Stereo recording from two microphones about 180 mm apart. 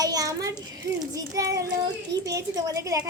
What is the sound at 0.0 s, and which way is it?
Child singing, 20° right (ahead or behind).